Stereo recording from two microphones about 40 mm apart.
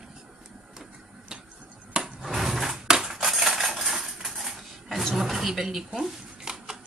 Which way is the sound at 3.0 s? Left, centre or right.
Centre.